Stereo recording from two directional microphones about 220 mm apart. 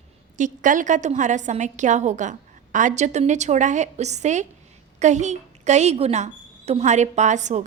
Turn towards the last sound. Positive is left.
turn(degrees=-35)  # may be behind; listen again after turning